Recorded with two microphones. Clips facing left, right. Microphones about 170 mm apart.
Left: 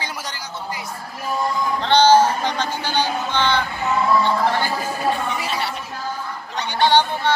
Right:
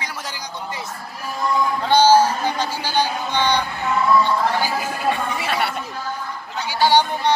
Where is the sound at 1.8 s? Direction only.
10° right (ahead or behind).